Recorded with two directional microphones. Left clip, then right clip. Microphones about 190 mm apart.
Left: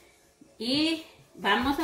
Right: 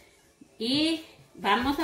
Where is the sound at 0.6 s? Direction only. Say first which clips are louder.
Right 1 dB; 10° left (ahead or behind).